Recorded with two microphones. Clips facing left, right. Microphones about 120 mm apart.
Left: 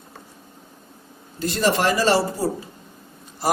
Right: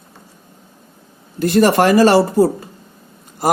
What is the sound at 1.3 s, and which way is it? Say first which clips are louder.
Speech: right 8 dB; 60° right (ahead or behind).